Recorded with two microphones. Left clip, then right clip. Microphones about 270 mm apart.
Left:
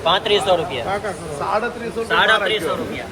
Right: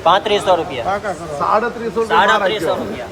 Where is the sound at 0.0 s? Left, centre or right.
Right.